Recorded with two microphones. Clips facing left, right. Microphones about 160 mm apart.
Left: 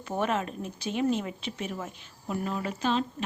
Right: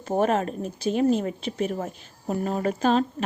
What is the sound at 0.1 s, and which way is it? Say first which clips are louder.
A woman's voice: right 6 dB; 40° right (ahead or behind).